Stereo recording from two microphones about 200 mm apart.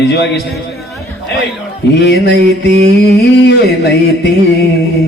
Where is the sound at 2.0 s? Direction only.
60° left (ahead or behind).